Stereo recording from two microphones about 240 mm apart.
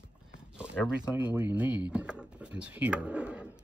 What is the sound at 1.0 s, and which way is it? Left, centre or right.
Speech, centre.